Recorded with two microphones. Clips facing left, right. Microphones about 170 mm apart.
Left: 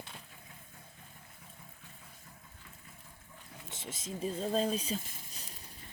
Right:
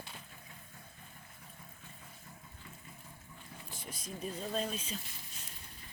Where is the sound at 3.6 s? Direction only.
25° left (ahead or behind).